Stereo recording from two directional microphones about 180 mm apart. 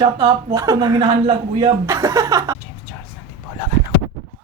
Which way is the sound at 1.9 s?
15° right (ahead or behind).